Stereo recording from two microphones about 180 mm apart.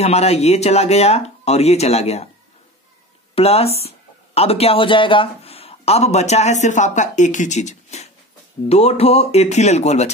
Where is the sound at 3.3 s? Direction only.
35° left (ahead or behind).